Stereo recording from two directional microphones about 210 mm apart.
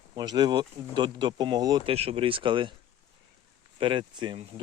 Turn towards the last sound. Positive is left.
turn(degrees=-20)  # may be behind; listen again after turning